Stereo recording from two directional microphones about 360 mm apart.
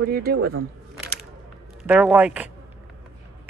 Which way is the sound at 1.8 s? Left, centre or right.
Centre.